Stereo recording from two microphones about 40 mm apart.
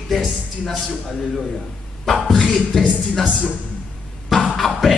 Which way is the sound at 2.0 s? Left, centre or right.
Centre.